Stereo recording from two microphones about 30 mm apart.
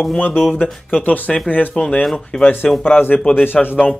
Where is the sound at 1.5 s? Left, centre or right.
Left.